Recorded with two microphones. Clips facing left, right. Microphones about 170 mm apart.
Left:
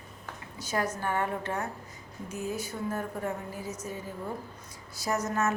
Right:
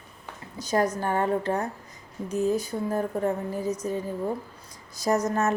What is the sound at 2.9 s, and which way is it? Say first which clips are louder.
Speech: right 9 dB; 35° right (ahead or behind).